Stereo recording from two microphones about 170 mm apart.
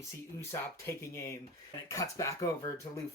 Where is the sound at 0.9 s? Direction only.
15° left (ahead or behind).